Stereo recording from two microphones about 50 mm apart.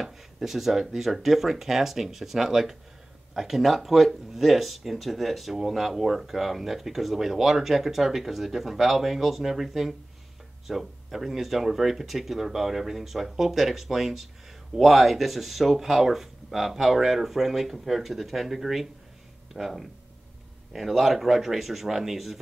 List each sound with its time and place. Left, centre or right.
0.0 s speech: centre